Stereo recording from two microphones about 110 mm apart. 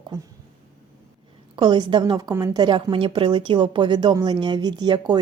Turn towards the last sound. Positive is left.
turn(degrees=-40)  # may be behind; listen again after turning